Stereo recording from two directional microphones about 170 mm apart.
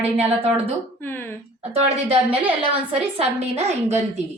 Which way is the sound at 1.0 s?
10° left (ahead or behind).